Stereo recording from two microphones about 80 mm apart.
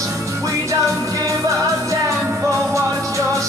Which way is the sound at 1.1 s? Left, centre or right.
Right.